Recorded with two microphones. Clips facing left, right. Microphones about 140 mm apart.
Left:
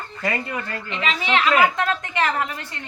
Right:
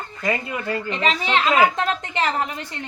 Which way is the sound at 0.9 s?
40° right (ahead or behind).